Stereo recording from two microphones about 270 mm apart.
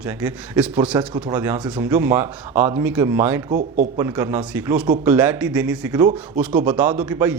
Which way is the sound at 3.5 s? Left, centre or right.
Right.